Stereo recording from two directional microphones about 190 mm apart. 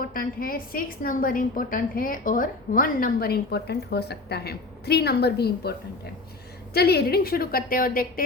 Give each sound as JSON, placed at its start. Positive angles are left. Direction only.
{"t": 0.0, "sound": "a woman's voice", "side_deg": 50}
{"t": 6.7, "sound": "a woman's voice", "side_deg": 55}